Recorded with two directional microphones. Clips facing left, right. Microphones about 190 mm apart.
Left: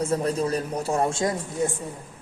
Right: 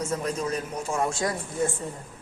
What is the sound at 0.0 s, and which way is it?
A man's voice, 35° left (ahead or behind).